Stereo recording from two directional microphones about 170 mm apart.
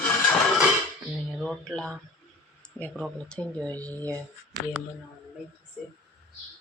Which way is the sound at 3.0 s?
5° left (ahead or behind).